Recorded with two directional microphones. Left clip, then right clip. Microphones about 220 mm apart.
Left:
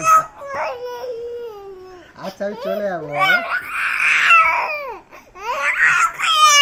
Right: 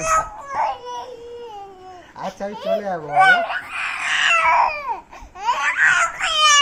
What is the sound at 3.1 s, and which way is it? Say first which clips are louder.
Speech: right 3 dB; 10° right (ahead or behind).